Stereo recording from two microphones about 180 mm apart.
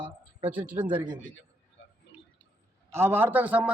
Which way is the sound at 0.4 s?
10° right (ahead or behind).